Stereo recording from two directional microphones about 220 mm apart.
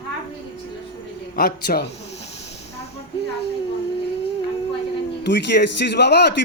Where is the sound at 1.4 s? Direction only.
45° left (ahead or behind).